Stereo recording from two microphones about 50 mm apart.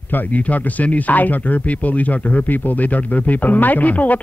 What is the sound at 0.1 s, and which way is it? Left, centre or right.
Speech, left.